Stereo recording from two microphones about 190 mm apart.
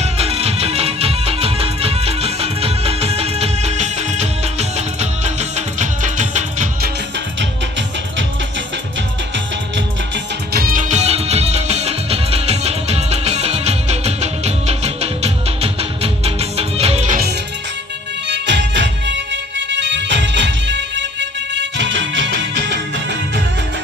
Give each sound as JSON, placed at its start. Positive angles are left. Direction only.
{"t": 0.0, "sound": "music", "side_deg": -30}
{"t": 10.5, "sound": "music", "side_deg": -50}
{"t": 18.3, "sound": "music", "side_deg": -70}